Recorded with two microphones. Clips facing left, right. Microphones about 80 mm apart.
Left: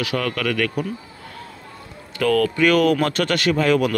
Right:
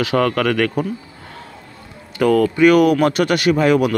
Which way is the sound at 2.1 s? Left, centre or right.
Right.